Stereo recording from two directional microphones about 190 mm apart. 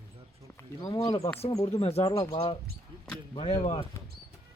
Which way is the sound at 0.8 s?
20° left (ahead or behind).